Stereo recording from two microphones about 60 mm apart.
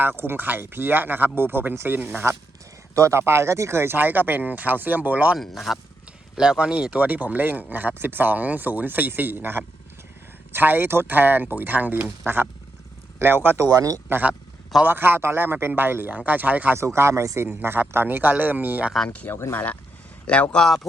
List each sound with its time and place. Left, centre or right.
0.0 s speech: right
2.9 s speech: right
3.9 s speech: right
5.4 s speech: centre
6.3 s speech: centre; by 13.6 s right
13.7 s speech: right
14.8 s speech: right
16.7 s speech: right
17.5 s speech: right
19.0 s speech: left